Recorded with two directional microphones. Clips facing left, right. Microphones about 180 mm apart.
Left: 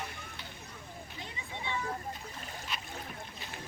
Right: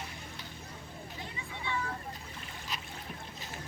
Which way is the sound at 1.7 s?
25° left (ahead or behind).